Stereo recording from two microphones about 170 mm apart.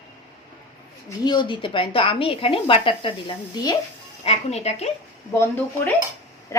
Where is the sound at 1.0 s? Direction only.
25° left (ahead or behind).